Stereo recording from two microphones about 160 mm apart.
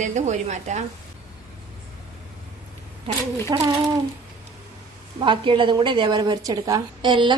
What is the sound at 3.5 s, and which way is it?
Speech, 25° right (ahead or behind).